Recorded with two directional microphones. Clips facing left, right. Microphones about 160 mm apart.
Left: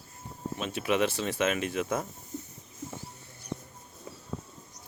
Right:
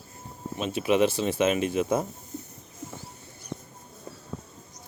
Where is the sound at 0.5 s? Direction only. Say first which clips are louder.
Right 5 dB; 25° right (ahead or behind).